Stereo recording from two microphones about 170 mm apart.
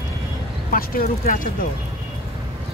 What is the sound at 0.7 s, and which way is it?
Speech, 55° left (ahead or behind).